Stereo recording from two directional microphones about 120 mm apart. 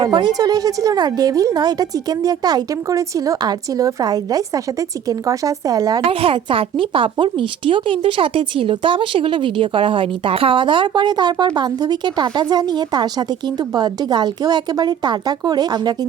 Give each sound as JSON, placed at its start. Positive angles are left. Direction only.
{"t": 0.0, "sound": "speech", "side_deg": -35}
{"t": 6.1, "sound": "speech", "side_deg": -50}